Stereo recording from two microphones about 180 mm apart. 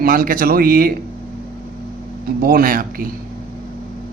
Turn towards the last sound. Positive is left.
turn(degrees=-50)  # may be behind; listen again after turning